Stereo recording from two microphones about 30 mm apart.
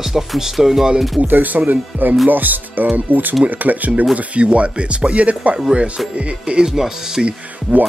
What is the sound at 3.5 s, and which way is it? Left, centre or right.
Speech, right.